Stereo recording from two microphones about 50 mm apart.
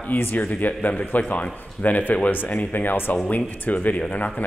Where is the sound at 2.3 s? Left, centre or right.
Left.